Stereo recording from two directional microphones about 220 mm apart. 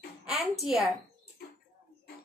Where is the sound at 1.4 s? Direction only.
45° left (ahead or behind).